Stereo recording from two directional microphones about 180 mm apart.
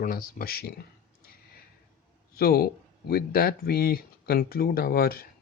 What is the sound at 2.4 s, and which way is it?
Speech, 60° left (ahead or behind).